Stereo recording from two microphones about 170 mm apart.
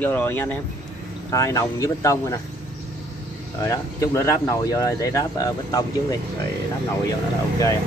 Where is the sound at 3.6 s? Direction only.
20° left (ahead or behind).